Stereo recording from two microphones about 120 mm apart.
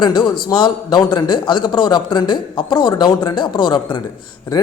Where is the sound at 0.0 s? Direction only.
40° left (ahead or behind).